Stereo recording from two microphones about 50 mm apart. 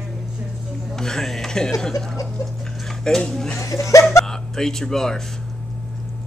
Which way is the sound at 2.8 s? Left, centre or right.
Centre.